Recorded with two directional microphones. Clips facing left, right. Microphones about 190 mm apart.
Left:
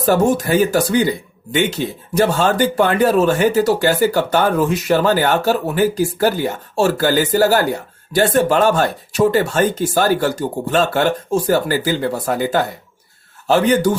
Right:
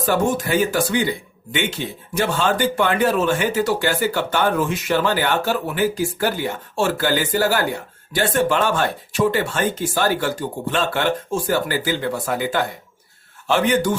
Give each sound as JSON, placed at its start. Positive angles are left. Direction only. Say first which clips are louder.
{"t": 0.0, "sound": "a man's voice", "louder": "left 5 dB", "side_deg": 40}